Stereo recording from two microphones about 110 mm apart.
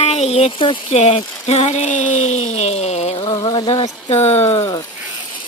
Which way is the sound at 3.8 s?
80° left.